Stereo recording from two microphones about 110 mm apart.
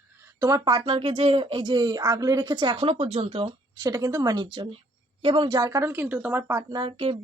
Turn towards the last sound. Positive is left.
turn(degrees=-50)  # may be behind; listen again after turning